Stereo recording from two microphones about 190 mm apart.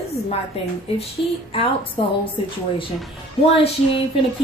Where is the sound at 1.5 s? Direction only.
30° left (ahead or behind).